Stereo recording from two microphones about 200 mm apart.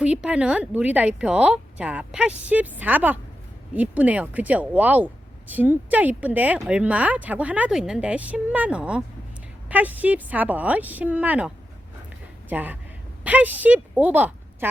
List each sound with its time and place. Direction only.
0.0 s speech: 5° right (ahead or behind)